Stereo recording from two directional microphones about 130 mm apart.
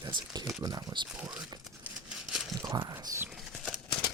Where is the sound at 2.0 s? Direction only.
5° right (ahead or behind).